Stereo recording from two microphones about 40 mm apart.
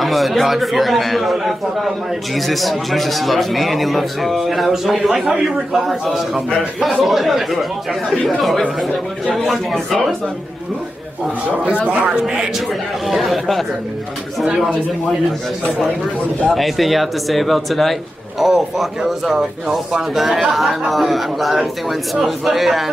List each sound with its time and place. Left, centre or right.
0.0 s a man's voice: centre
7.0 s a man's voice: centre
11.9 s a man's voice: right
13.1 s a man's voice: centre
14.4 s a man's voice: centre
16.5 s a man's voice: centre